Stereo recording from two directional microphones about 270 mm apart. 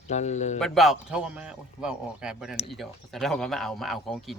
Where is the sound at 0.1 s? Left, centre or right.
Left.